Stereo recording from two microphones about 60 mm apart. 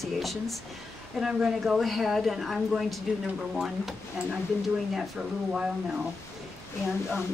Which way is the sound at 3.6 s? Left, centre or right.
Centre.